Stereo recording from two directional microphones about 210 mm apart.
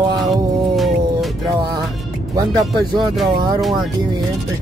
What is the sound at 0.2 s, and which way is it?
Music, centre (ahead or behind).